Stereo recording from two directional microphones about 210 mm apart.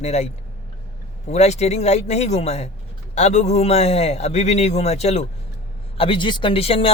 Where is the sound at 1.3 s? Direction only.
30° left (ahead or behind).